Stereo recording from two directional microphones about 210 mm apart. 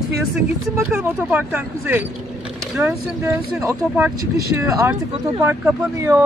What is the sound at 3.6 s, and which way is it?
Speech, 15° right (ahead or behind).